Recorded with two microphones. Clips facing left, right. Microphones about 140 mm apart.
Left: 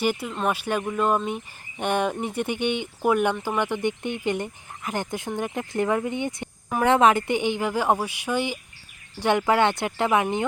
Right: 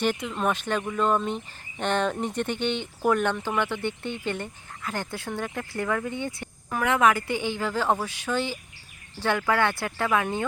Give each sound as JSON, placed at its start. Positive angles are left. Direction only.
{"t": 0.0, "sound": "speech", "side_deg": 10}